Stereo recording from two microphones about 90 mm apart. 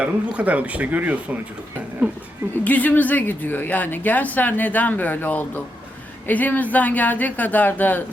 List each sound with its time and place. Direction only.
0.0 s speech: 15° right (ahead or behind)
2.6 s speech: 20° left (ahead or behind)